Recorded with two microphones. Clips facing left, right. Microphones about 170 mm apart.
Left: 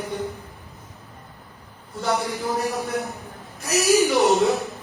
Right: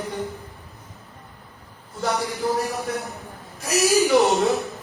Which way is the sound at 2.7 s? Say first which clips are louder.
Left 2 dB; centre (ahead or behind).